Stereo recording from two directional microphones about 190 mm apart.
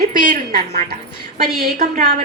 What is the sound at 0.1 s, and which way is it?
A woman's voice, 45° right (ahead or behind).